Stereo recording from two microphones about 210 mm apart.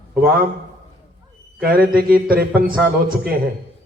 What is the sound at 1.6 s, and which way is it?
A man's voice, 45° right (ahead or behind).